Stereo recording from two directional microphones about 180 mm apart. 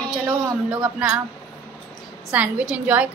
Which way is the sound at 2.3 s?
5° right (ahead or behind).